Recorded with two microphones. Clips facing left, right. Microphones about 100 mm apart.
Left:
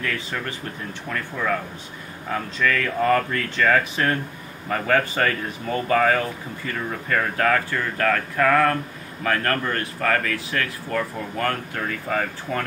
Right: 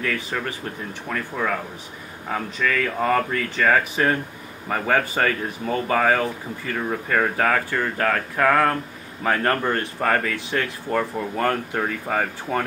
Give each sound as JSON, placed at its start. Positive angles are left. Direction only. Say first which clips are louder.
{"t": 0.0, "sound": "speech", "louder": "right 2 dB", "side_deg": -10}
{"t": 2.6, "sound": "speech", "louder": "left 1 dB", "side_deg": -10}